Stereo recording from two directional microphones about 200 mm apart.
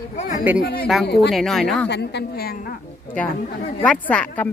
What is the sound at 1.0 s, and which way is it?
Speech, 55° left (ahead or behind).